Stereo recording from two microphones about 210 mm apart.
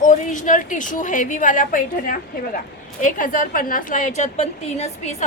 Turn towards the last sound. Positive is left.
turn(degrees=30)  # may be behind; listen again after turning